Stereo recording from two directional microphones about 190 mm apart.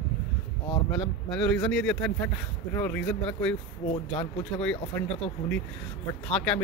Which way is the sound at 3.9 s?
25° left (ahead or behind).